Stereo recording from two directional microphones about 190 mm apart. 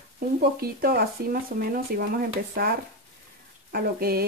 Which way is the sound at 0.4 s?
55° right (ahead or behind).